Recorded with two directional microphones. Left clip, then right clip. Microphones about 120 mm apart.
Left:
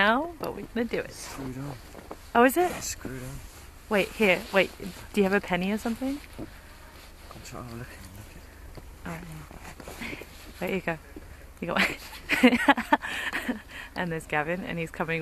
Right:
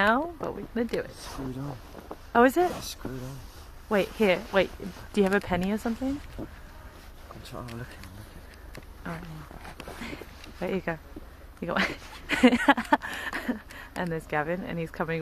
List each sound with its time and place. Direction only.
0.0 s speech: 10° left (ahead or behind)
1.3 s speech: 15° right (ahead or behind)
2.3 s speech: 15° left (ahead or behind)
3.1 s speech: 25° right (ahead or behind)
3.9 s speech: 10° left (ahead or behind)
9.9 s speech: 10° left (ahead or behind)